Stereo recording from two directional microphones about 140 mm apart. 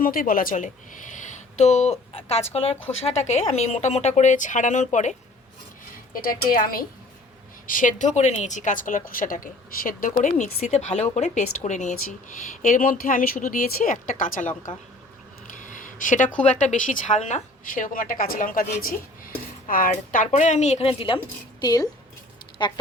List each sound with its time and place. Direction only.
0.0 s a woman's voice: 90° left; by 5.1 s 60° left (ahead or behind)
6.1 s speech: 90° left
7.7 s a woman's voice: 70° left (ahead or behind)
15.5 s a sound: 65° left (ahead or behind)
16.4 s a woman's voice: 55° left (ahead or behind); by 21.2 s 40° left (ahead or behind)
21.6 s speech: 30° left (ahead or behind)